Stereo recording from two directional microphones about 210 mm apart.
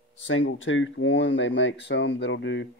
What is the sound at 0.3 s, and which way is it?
Speech, 65° left (ahead or behind).